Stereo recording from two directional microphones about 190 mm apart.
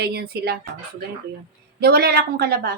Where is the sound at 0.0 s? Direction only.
60° right (ahead or behind).